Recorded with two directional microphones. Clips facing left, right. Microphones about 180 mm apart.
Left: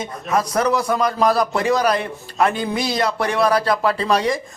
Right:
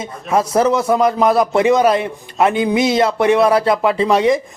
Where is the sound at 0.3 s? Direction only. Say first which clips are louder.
Right 4 dB; 25° right (ahead or behind).